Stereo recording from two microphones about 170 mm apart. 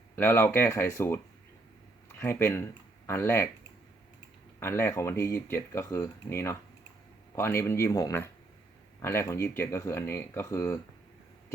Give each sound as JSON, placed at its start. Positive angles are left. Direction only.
{"t": 0.2, "sound": "speech", "side_deg": 15}
{"t": 4.6, "sound": "speech", "side_deg": 15}